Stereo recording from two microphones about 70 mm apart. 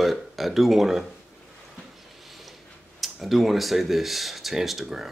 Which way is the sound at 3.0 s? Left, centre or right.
Centre.